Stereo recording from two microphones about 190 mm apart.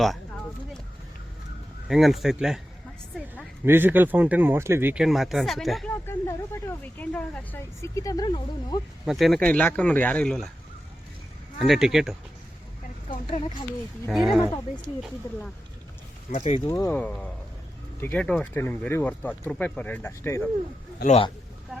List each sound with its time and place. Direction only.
1.9 s speech: centre (ahead or behind)
3.6 s speech: 10° right (ahead or behind)
5.9 s speech: 15° left (ahead or behind)
9.0 s speech: centre (ahead or behind)
11.6 s speech: centre (ahead or behind)
13.1 s speech: 30° left (ahead or behind)
14.1 s speech: centre (ahead or behind)
16.3 s speech: 35° left (ahead or behind)
16.6 s speech: 20° left (ahead or behind)
17.0 s speech: 5° left (ahead or behind)
21.0 s speech: 35° left (ahead or behind)